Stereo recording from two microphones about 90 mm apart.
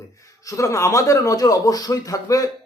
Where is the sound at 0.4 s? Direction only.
35° left (ahead or behind).